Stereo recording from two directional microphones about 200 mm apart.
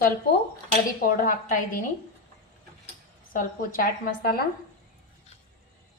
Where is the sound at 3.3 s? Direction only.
45° left (ahead or behind).